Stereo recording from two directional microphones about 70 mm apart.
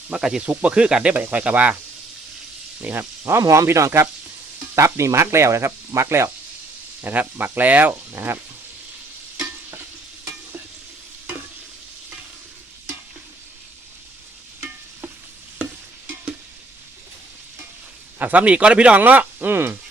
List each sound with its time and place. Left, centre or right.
0.1 s speech: centre
0.4 s speech: centre
1.1 s speech: right
2.8 s speech: right
3.4 s speech: right
7.0 s speech: right
18.2 s speech: right